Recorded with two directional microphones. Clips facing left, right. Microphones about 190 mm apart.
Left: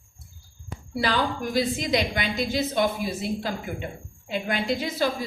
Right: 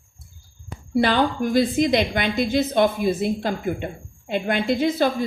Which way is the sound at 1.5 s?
50° right (ahead or behind).